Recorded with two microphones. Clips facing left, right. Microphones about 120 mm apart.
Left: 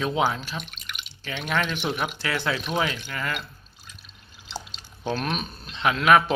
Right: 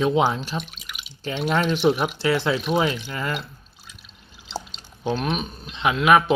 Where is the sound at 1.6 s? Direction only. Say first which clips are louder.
Right 6 dB; 30° right (ahead or behind).